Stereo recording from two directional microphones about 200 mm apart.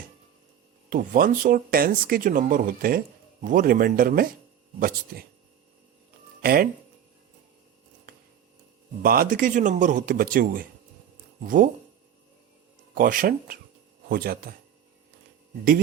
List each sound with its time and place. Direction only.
0.9 s speech: 45° right (ahead or behind)
6.4 s speech: 50° right (ahead or behind)
9.0 s speech: 45° right (ahead or behind)
12.9 s speech: 45° right (ahead or behind)